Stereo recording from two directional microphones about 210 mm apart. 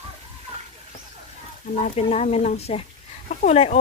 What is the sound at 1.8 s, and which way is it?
Speech, 30° left (ahead or behind).